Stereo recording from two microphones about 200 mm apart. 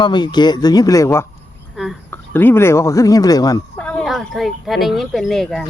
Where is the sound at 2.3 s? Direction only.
10° left (ahead or behind).